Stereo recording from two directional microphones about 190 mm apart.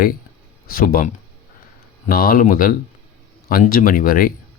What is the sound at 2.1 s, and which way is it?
Speech, 50° left (ahead or behind).